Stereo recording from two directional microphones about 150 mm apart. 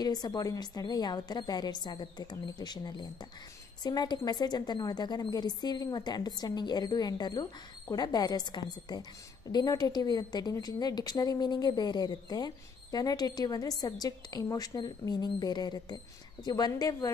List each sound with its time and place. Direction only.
0.0 s a woman's voice: 25° left (ahead or behind)